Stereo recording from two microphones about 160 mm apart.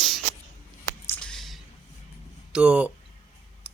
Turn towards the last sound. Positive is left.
turn(degrees=-10)  # may be behind; listen again after turning